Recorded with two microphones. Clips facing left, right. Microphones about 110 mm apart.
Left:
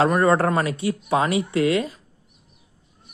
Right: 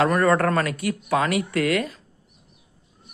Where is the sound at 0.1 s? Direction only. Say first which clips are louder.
Left 1 dB; 25° left (ahead or behind).